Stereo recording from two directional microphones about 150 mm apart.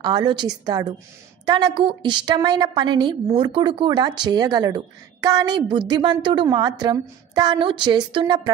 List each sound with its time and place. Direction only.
0.0 s a woman's voice: 30° right (ahead or behind)